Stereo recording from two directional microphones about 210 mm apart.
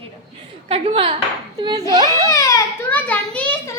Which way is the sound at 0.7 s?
30° right (ahead or behind).